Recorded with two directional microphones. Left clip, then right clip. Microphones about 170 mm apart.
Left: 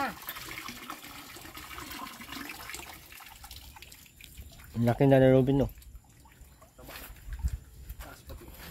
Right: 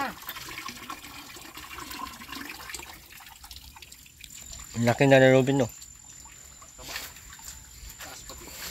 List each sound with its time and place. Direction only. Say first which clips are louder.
0.0 s water: right 1 dB; 20° left (ahead or behind)
4.7 s speech: right 4 dB; 15° left (ahead or behind)